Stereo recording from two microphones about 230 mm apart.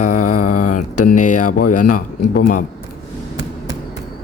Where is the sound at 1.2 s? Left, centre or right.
Left.